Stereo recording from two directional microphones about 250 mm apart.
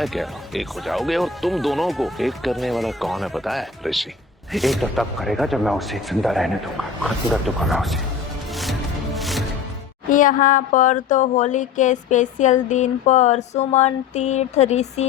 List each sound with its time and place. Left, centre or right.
0.0 s speech: centre
9.1 s music: centre
10.1 s a sound: left